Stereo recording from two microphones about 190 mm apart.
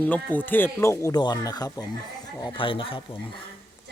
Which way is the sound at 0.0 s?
10° left (ahead or behind).